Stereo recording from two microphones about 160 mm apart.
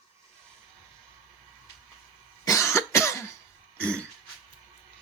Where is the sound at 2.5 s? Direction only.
20° left (ahead or behind).